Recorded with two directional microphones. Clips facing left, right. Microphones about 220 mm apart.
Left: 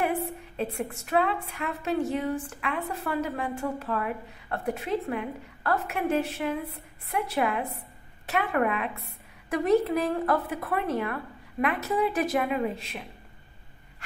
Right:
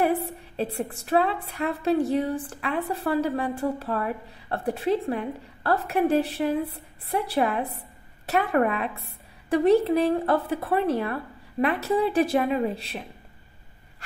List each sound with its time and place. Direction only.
0.6 s a woman's voice: 35° right (ahead or behind)